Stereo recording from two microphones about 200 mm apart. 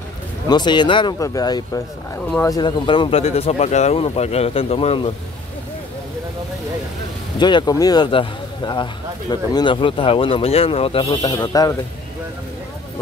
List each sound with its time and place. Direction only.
0.5 s speech: 20° left (ahead or behind)
7.3 s speech: 20° left (ahead or behind)